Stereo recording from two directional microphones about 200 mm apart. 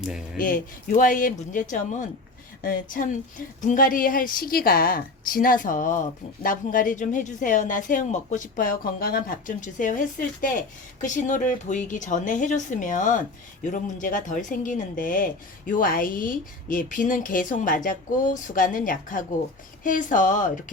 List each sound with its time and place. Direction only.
0.3 s speech: 45° left (ahead or behind)